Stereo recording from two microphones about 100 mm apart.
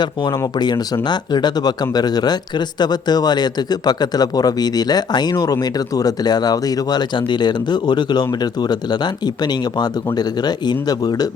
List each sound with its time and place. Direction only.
0.0 s speech: 45° left (ahead or behind)